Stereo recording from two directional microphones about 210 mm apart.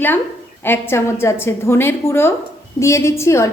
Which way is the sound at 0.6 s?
10° left (ahead or behind).